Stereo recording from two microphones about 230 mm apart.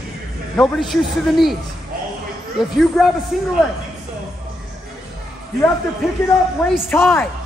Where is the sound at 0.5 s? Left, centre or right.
Centre.